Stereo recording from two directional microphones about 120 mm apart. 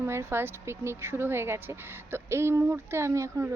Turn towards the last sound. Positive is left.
turn(degrees=-25)  # may be behind; listen again after turning